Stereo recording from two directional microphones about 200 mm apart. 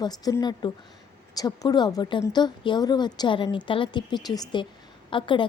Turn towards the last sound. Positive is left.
turn(degrees=25)  # may be behind; listen again after turning